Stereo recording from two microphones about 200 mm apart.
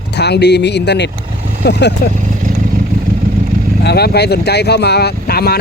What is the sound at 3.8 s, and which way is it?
Speech, 55° left (ahead or behind).